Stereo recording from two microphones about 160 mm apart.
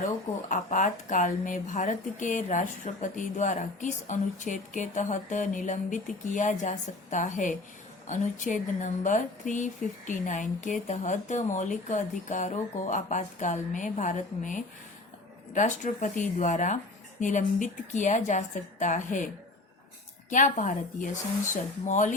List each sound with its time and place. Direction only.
0.0 s speech: 50° left (ahead or behind)
20.3 s speech: 55° left (ahead or behind)